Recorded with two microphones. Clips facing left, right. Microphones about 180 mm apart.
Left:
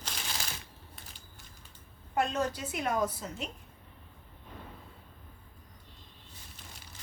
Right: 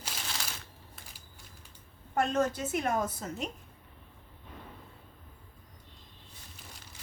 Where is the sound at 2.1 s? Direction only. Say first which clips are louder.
Right 2 dB; 50° right (ahead or behind).